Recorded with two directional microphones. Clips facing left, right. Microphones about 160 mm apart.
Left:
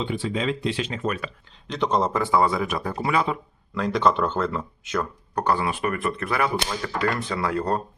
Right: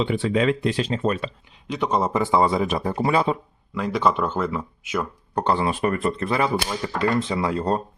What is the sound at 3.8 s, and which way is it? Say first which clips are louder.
Speech: even; 5° right (ahead or behind).